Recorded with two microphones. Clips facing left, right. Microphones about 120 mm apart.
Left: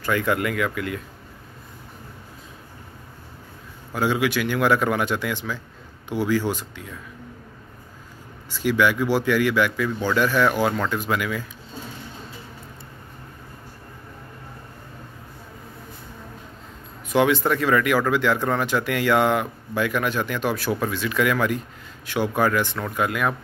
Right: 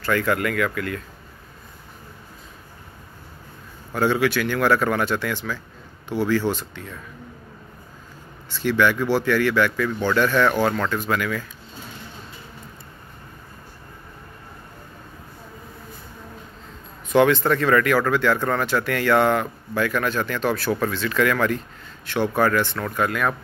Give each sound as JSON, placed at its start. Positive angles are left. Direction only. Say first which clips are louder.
{"t": 0.0, "sound": "speech", "louder": "right 1 dB", "side_deg": 15}
{"t": 3.9, "sound": "speech", "louder": "right 2 dB", "side_deg": 10}
{"t": 8.5, "sound": "speech", "louder": "even", "side_deg": 10}
{"t": 17.1, "sound": "speech", "louder": "right 2 dB", "side_deg": 10}